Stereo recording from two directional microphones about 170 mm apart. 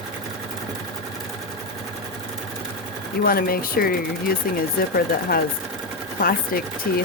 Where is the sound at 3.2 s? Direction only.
60° left (ahead or behind).